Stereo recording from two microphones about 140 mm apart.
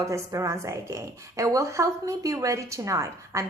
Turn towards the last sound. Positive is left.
turn(degrees=-20)  # may be behind; listen again after turning